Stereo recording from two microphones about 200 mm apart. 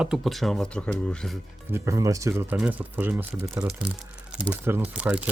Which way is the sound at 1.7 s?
15° right (ahead or behind).